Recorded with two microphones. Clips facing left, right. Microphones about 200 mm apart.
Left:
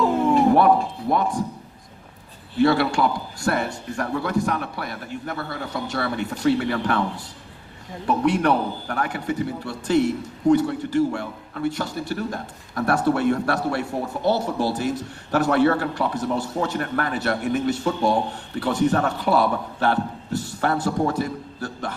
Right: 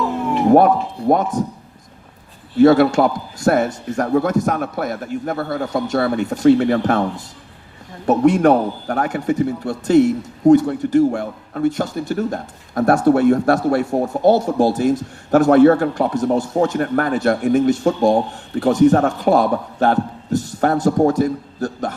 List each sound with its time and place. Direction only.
0.5 s a man's voice: 45° right (ahead or behind)
2.6 s a man's voice: 45° right (ahead or behind)
8.0 s a man's voice: 45° right (ahead or behind)